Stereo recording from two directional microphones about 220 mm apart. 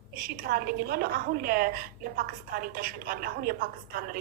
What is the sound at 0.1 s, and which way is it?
A woman's voice, 40° right (ahead or behind).